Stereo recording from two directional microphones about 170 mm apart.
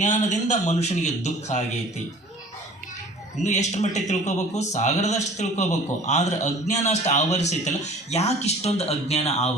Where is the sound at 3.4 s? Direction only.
45° left (ahead or behind).